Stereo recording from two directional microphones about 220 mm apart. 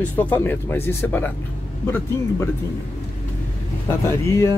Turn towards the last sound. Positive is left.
turn(degrees=10)  # may be behind; listen again after turning